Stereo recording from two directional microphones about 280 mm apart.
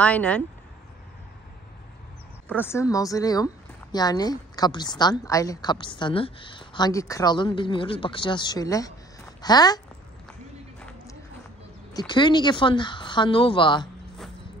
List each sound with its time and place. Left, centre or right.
0.0 s speech: centre
2.4 s a woman's voice: centre
11.9 s a woman's voice: centre